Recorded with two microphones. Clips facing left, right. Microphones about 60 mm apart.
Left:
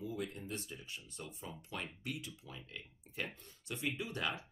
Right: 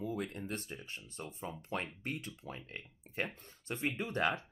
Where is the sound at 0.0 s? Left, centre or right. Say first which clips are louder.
Right 3 dB; right.